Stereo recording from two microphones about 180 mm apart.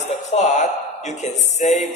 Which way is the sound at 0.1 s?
40° left (ahead or behind).